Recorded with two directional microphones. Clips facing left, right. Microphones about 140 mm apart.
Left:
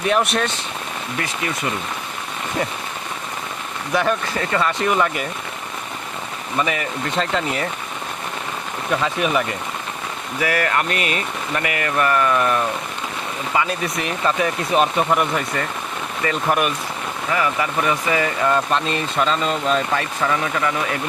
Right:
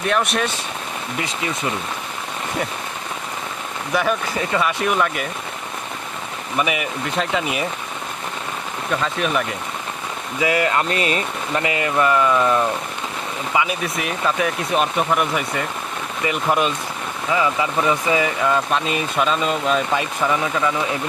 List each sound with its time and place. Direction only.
0.0 s speech: centre (ahead or behind)
3.9 s speech: centre (ahead or behind)
6.6 s speech: 10° right (ahead or behind)
9.2 s speech: centre (ahead or behind)
10.4 s speech: 20° right (ahead or behind)
13.6 s speech: 5° right (ahead or behind)
18.4 s speech: 5° right (ahead or behind)
20.0 s speech: 15° right (ahead or behind)